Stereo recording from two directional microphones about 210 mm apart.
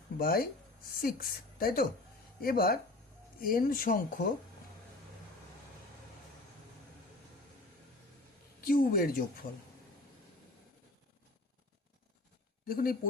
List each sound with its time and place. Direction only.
0.2 s speech: 45° left (ahead or behind)
8.6 s speech: 45° left (ahead or behind)
12.6 s speech: 45° left (ahead or behind)